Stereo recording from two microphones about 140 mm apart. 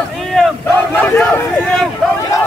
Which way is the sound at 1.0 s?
5° left (ahead or behind).